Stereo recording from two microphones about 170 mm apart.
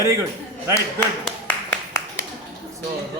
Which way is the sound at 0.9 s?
5° left (ahead or behind).